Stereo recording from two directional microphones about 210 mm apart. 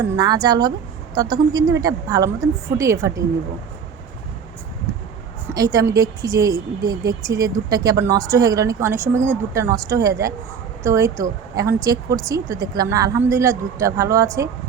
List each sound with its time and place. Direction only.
0.0 s a woman's voice: 20° right (ahead or behind)
5.5 s a woman's voice: 15° right (ahead or behind)